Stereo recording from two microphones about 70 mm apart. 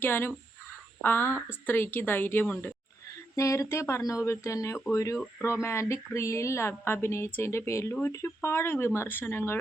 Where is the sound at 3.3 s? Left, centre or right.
Left.